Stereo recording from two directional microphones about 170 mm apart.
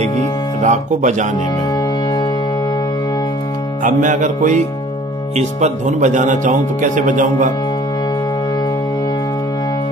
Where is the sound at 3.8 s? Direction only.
50° right (ahead or behind).